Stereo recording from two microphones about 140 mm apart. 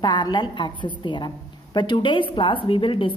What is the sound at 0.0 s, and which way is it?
A woman's voice, 30° left (ahead or behind).